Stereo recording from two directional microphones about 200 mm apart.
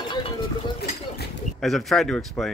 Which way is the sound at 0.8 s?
55° left (ahead or behind).